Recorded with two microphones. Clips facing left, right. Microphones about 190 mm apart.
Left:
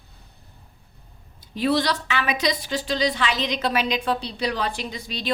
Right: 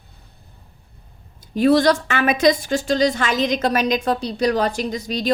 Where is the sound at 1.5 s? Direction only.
45° right (ahead or behind).